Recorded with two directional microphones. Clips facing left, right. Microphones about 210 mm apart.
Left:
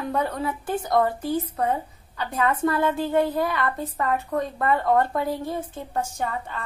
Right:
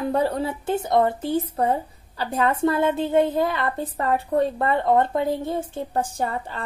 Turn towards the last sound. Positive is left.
turn(degrees=-35)  # may be behind; listen again after turning